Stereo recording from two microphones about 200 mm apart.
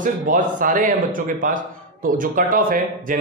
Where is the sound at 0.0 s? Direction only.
40° right (ahead or behind).